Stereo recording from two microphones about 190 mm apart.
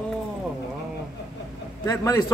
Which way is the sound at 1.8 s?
15° left (ahead or behind).